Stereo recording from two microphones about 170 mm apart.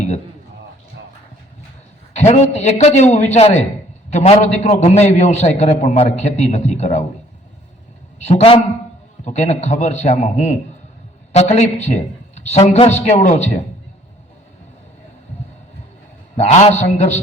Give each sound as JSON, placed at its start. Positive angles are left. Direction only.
{"t": 2.1, "sound": "a man's voice", "side_deg": 40}
{"t": 8.2, "sound": "a man's voice", "side_deg": 40}
{"t": 16.4, "sound": "a man's voice", "side_deg": 40}